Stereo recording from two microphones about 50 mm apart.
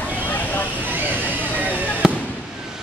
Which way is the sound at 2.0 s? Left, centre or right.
Centre.